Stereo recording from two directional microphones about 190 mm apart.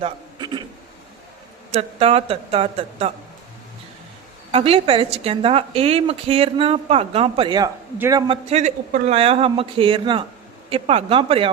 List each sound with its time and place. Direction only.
0.0 s a sound: 25° right (ahead or behind)
1.7 s a woman's voice: 30° right (ahead or behind)
4.5 s a woman's voice: 30° right (ahead or behind)
7.9 s speech: 15° right (ahead or behind)
8.3 s a woman's voice: 35° right (ahead or behind)